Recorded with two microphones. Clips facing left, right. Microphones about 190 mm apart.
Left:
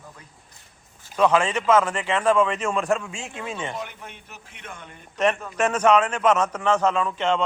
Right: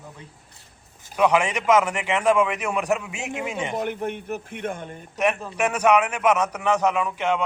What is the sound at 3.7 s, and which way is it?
A man's voice, 55° right (ahead or behind).